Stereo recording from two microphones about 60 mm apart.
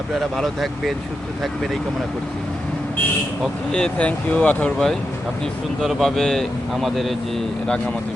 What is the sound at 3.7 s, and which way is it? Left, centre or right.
Speech, centre.